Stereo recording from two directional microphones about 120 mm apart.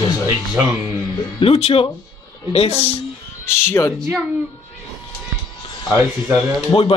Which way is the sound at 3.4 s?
20° left (ahead or behind).